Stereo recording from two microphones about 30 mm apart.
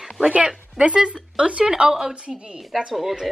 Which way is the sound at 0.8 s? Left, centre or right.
Right.